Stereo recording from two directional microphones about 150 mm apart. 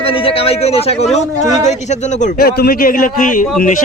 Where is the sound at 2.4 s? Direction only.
85° left; by 3.4 s 65° left (ahead or behind).